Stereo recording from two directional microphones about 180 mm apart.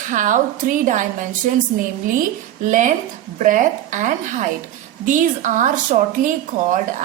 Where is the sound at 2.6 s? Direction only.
45° right (ahead or behind).